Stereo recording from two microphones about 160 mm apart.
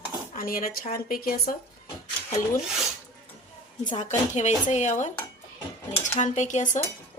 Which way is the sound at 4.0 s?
45° left (ahead or behind).